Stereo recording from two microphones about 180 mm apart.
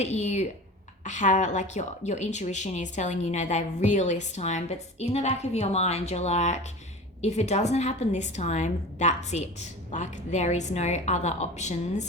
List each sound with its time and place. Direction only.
0.0 s speech: 40° left (ahead or behind)